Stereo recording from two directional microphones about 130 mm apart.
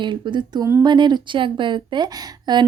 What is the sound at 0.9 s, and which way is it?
A woman's voice, 35° right (ahead or behind).